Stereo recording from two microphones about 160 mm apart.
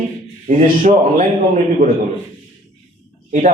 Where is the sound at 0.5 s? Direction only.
55° right (ahead or behind).